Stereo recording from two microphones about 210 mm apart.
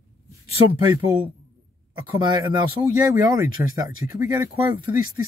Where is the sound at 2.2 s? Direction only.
20° right (ahead or behind).